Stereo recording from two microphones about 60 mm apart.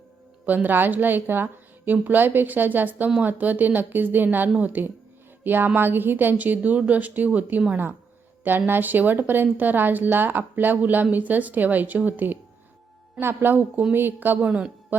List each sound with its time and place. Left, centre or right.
0.4 s a woman's voice: right
14.4 s a woman's voice: centre